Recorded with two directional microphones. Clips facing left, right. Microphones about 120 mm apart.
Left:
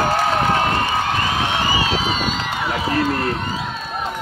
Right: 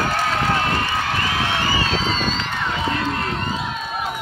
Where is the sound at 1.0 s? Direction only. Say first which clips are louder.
Left 2 dB; 20° left (ahead or behind).